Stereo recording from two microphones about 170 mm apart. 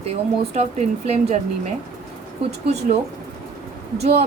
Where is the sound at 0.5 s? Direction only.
40° right (ahead or behind).